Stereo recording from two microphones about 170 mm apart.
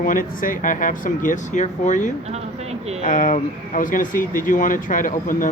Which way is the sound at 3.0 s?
50° left (ahead or behind).